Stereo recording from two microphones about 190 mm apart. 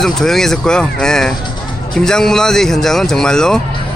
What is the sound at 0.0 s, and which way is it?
Speech, centre (ahead or behind).